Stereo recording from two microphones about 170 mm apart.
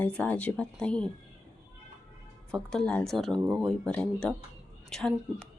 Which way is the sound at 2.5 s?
5° left (ahead or behind).